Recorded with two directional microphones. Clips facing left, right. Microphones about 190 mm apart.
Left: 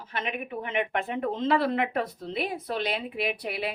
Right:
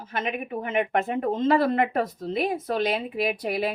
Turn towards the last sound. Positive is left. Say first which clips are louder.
# right 5 dB
turn(degrees=-45)  # may be behind; listen again after turning